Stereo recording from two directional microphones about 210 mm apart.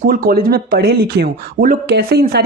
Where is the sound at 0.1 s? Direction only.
45° right (ahead or behind).